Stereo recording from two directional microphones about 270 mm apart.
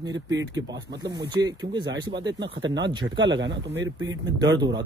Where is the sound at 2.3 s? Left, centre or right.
Right.